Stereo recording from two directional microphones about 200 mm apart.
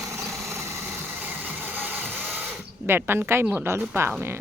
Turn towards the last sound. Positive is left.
turn(degrees=-10)  # may be behind; listen again after turning